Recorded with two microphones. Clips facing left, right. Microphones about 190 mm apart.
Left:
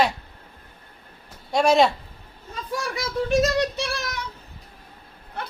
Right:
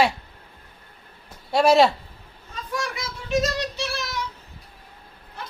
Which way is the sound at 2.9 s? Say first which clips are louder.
Left 5 dB; 50° left (ahead or behind).